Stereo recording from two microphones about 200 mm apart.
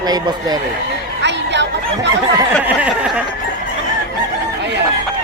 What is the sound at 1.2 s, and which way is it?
Music, 60° right (ahead or behind).